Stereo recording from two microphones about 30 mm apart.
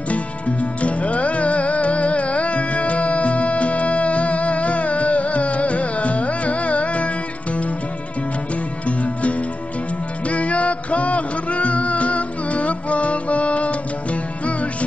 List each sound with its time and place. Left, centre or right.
0.1 s music: left
8.8 s music: left